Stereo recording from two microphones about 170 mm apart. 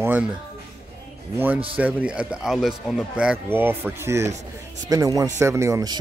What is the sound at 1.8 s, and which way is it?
Speech, 10° right (ahead or behind).